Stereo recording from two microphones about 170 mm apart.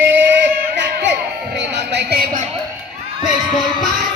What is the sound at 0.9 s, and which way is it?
Music, 80° right.